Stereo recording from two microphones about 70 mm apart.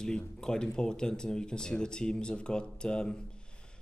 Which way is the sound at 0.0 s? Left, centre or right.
Centre.